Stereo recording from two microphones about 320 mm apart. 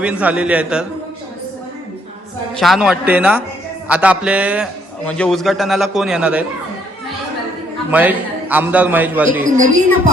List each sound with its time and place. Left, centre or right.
0.0 s a man's voice: centre
2.6 s a man's voice: centre
7.9 s a man's voice: centre
9.4 s speech: right